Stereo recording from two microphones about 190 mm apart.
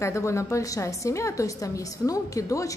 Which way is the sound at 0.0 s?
15° left (ahead or behind).